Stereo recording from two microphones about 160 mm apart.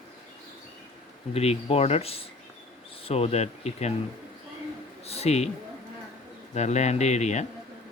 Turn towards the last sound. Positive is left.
turn(degrees=45)  # may be behind; listen again after turning